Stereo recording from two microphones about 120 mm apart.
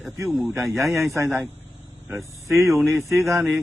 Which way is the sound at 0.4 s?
20° right (ahead or behind).